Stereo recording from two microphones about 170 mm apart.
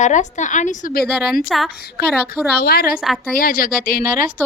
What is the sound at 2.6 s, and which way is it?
Speech, 65° left (ahead or behind).